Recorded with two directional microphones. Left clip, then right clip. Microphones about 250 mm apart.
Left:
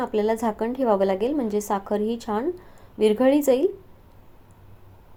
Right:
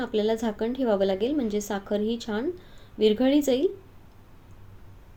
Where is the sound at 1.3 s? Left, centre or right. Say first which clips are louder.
Left 3 dB; centre.